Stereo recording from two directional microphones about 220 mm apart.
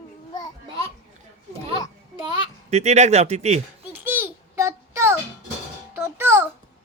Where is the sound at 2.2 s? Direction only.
25° right (ahead or behind).